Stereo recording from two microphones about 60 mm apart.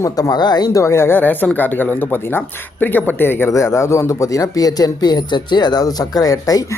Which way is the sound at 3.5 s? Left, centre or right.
Left.